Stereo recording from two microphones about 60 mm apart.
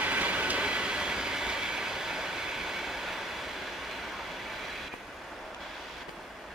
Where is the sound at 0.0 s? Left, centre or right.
Right; by 3.9 s centre.